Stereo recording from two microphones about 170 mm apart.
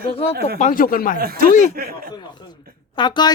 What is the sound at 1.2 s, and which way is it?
Speech, 65° right (ahead or behind).